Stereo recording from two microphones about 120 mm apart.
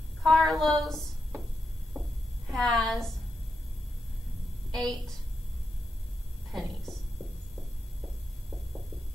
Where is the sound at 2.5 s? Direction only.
5° left (ahead or behind).